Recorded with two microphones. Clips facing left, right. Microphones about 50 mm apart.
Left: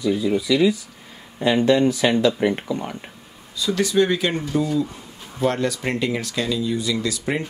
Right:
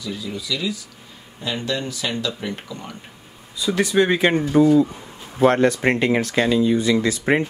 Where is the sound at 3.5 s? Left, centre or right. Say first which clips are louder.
Right 1 dB; right.